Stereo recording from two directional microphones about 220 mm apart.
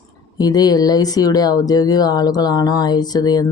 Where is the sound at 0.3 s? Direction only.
15° left (ahead or behind).